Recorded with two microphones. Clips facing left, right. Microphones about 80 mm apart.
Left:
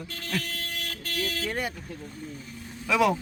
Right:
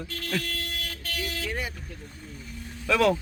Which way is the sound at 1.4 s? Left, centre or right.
Left.